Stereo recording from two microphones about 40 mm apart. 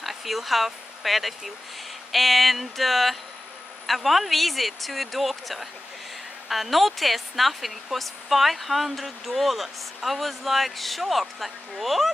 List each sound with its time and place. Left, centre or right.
0.0 s speech: centre